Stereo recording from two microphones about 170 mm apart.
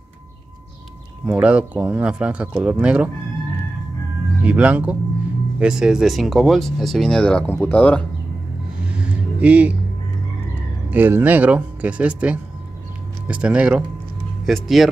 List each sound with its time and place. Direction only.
1.2 s speech: 5° right (ahead or behind)
4.4 s speech: 5° right (ahead or behind); by 8.0 s 10° left (ahead or behind)
8.8 s a sound: 5° right (ahead or behind)
10.9 s speech: 10° right (ahead or behind)